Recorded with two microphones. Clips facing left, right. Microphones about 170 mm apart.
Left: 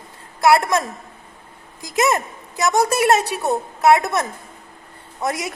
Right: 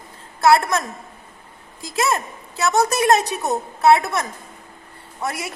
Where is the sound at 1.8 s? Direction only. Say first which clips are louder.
Left 3 dB; 20° left (ahead or behind).